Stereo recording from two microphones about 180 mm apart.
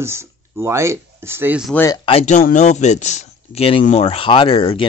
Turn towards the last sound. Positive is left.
turn(degrees=30)  # may be behind; listen again after turning